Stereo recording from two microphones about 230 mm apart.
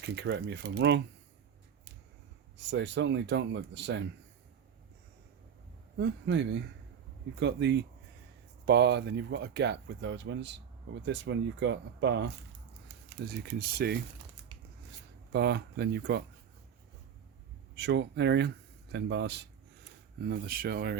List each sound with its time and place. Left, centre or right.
0.0 s speech: right
2.6 s speech: right
6.0 s speech: right
15.3 s speech: right
17.7 s speech: right